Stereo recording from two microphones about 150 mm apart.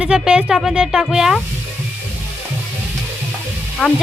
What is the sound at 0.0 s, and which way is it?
Speech, 10° right (ahead or behind).